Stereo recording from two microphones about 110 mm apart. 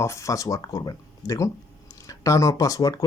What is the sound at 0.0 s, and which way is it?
Speech, 25° left (ahead or behind).